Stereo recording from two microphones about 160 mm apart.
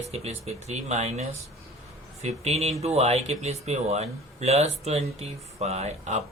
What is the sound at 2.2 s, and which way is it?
Speech, 40° right (ahead or behind).